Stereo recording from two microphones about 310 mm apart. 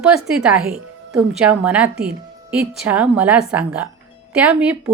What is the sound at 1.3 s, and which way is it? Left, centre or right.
A woman's voice, centre.